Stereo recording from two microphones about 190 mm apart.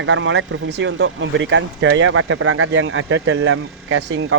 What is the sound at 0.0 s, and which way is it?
Speech, 75° right (ahead or behind).